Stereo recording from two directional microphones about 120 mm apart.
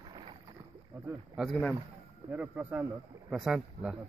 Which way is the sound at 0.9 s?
15° right (ahead or behind).